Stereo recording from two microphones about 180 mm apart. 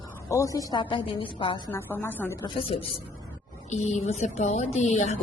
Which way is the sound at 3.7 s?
40° left (ahead or behind).